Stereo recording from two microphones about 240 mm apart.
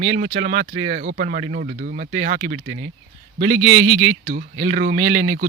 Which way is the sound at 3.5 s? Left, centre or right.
Centre.